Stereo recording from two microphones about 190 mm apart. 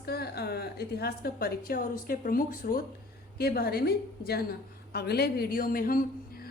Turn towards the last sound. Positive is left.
turn(degrees=50)  # may be behind; listen again after turning